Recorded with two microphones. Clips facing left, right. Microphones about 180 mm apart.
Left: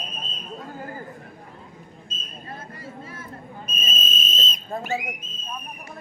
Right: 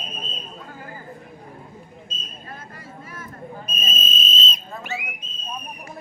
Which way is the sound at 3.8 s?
50° left (ahead or behind).